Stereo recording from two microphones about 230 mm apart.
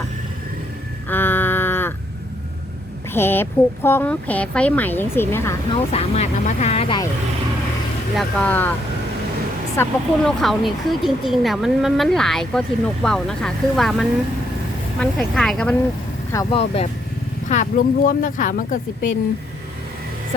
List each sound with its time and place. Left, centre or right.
1.1 s a sound: centre
3.1 s speech: centre
5.7 s speech: left
8.1 s speech: centre
9.8 s speech: centre
16.3 s speech: centre; by 18.8 s left